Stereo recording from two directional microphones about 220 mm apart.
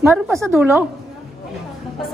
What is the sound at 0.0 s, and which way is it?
Speech, 10° right (ahead or behind).